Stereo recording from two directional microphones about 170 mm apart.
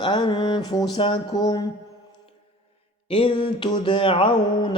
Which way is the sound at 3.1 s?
30° left (ahead or behind).